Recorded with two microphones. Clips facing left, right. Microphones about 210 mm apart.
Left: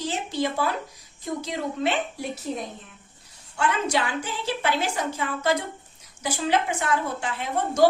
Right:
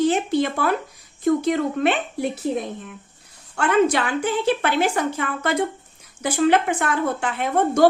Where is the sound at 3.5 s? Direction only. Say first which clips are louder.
Right 6 dB; 55° right (ahead or behind).